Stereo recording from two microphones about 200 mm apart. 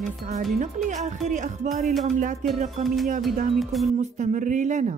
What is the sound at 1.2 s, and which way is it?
Speech, 35° right (ahead or behind).